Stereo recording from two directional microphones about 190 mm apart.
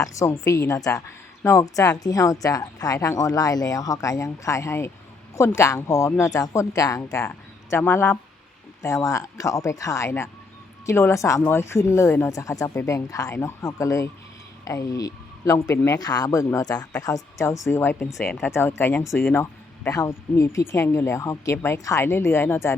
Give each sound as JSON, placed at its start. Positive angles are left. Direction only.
{"t": 0.0, "sound": "a woman's voice", "side_deg": 15}